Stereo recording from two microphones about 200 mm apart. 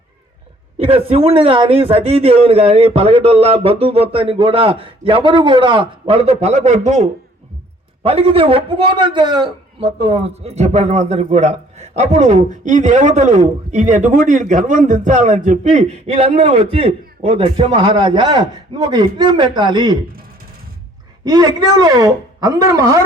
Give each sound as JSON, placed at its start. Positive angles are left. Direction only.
{"t": 0.8, "sound": "a man's voice", "side_deg": -30}
{"t": 21.2, "sound": "speech", "side_deg": -20}